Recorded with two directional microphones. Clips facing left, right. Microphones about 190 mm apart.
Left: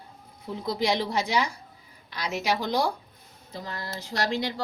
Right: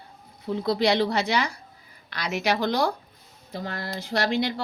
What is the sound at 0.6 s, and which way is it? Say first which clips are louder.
A woman's voice: right 4 dB; 70° right (ahead or behind).